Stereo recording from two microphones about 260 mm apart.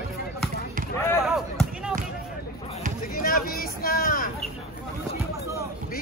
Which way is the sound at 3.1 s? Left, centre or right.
Left.